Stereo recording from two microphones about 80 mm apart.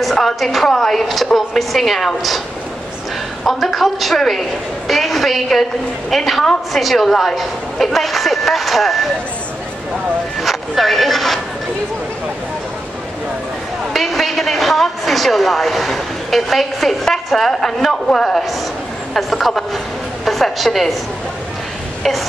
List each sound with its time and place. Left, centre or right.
0.0 s a woman's voice: centre
3.4 s a woman's voice: centre
10.4 s speech: centre
13.9 s a woman's voice: centre